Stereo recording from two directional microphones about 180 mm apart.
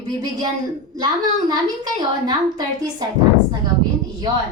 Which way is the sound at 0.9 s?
25° right (ahead or behind).